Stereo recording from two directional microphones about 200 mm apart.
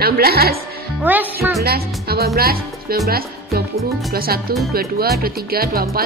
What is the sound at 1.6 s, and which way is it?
Speech, 50° right (ahead or behind).